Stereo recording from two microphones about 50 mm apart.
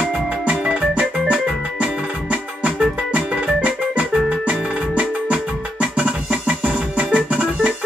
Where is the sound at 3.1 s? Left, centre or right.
Right.